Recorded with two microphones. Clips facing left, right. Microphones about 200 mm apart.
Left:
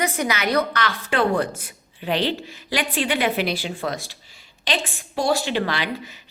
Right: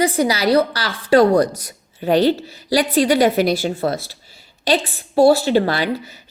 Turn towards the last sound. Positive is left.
turn(degrees=-40)  # may be behind; listen again after turning